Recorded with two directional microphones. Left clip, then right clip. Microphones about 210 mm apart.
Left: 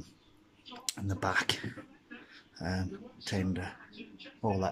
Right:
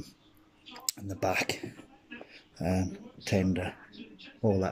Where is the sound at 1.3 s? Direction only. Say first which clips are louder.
Even; 50° left (ahead or behind).